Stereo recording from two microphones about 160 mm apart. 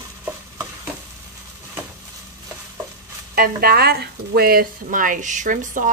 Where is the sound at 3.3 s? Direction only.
70° right (ahead or behind).